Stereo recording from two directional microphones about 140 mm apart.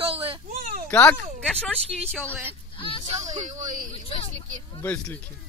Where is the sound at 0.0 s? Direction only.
45° right (ahead or behind).